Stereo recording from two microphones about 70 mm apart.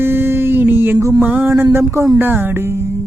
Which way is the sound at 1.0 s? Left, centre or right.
Right.